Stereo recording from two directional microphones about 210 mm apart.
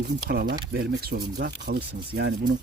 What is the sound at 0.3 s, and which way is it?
Speech, 50° right (ahead or behind).